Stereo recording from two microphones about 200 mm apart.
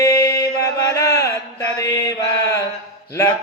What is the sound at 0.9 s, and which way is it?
Chant, 15° left (ahead or behind).